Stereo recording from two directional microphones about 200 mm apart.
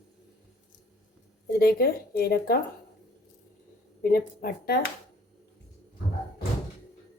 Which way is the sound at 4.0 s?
50° left (ahead or behind).